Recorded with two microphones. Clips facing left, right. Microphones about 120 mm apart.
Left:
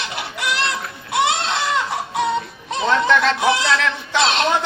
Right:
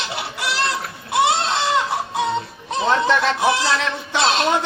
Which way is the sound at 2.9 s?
20° right (ahead or behind).